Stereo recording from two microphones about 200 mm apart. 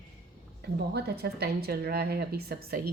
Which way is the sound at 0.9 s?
55° right (ahead or behind).